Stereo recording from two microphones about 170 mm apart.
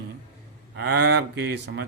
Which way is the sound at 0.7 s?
75° right (ahead or behind).